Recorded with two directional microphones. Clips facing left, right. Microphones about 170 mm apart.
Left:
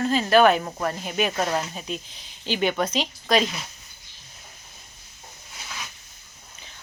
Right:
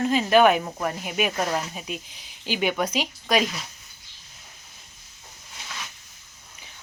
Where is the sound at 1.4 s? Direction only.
10° left (ahead or behind).